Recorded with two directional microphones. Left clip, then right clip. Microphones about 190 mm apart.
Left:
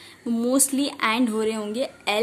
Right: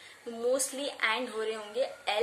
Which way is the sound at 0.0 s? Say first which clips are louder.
Left 6 dB; 60° left (ahead or behind).